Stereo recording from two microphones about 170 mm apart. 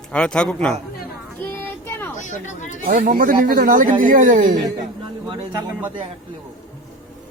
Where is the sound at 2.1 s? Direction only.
45° left (ahead or behind).